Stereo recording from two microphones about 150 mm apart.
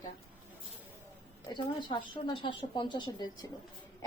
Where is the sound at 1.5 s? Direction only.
30° left (ahead or behind).